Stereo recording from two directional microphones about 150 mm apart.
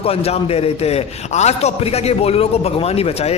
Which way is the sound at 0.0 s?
40° left (ahead or behind).